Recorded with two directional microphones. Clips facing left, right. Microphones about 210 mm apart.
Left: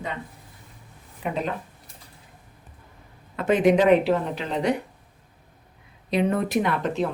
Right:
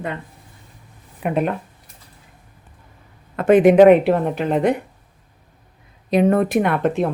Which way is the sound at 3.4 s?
55° right (ahead or behind).